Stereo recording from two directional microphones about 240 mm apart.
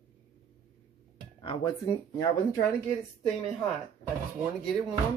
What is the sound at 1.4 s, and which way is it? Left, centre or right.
Speech, centre.